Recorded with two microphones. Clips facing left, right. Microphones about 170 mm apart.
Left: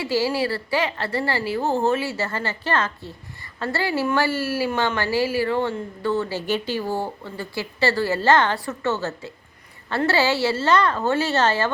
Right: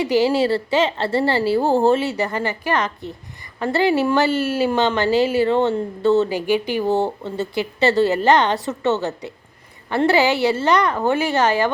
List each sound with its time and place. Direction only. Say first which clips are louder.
0.0 s a woman's voice: right 5 dB; 20° right (ahead or behind)